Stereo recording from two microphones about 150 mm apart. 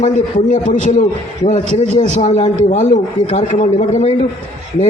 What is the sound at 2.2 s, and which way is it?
A man's voice, 45° left (ahead or behind).